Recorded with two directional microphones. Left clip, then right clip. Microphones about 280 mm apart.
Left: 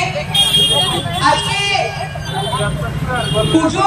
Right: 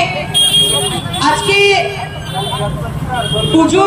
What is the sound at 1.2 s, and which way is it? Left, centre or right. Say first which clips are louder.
Speech: right 4 dB; right.